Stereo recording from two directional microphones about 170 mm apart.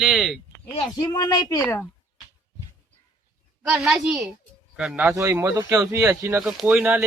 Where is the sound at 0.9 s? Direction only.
25° left (ahead or behind).